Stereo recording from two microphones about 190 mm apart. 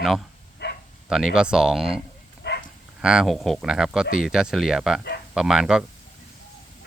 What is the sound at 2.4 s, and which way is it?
Livestock, 60° left (ahead or behind).